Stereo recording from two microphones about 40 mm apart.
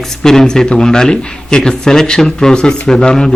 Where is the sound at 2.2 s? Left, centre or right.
Left.